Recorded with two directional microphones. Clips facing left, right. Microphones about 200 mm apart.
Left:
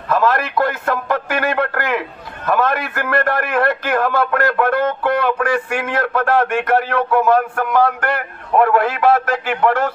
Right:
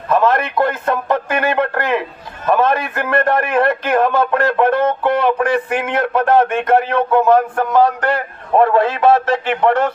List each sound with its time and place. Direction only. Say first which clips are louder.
0.1 s a man's voice: right 2 dB; 25° right (ahead or behind)